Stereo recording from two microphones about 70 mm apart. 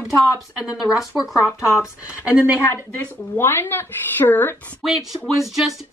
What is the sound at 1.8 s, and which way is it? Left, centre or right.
Speech, centre.